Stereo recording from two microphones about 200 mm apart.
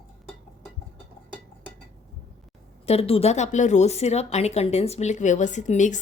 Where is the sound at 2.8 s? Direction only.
30° left (ahead or behind).